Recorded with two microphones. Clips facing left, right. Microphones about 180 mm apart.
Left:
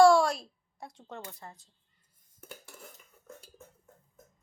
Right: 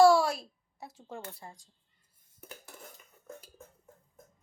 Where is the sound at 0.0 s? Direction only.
5° right (ahead or behind).